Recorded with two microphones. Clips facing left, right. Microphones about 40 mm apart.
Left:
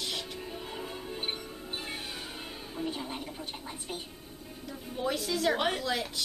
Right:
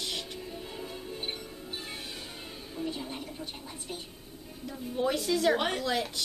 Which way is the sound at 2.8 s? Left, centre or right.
Centre.